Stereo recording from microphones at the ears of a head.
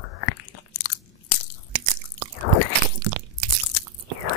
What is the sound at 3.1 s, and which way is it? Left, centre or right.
Crunch, right.